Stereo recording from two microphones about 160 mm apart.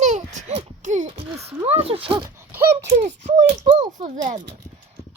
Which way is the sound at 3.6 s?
25° right (ahead or behind).